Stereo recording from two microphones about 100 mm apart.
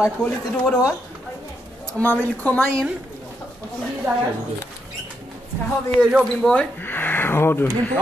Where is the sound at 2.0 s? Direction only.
20° left (ahead or behind).